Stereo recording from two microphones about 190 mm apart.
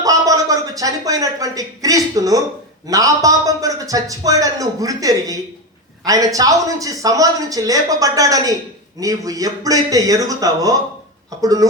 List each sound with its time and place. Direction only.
0.0 s a man's voice: 20° right (ahead or behind)